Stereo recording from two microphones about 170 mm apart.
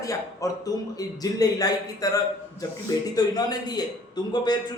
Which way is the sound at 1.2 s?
20° left (ahead or behind).